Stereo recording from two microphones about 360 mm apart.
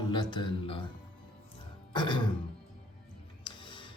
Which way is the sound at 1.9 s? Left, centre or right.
Centre.